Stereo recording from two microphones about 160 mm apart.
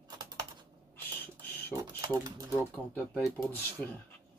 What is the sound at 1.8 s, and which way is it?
Speech, 25° right (ahead or behind).